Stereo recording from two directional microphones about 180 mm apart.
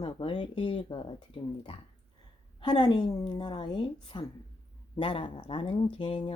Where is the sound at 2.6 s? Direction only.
25° left (ahead or behind).